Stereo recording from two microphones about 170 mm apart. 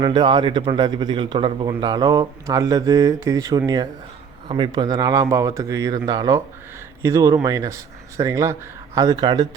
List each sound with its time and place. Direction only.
0.0 s a man's voice: 25° right (ahead or behind)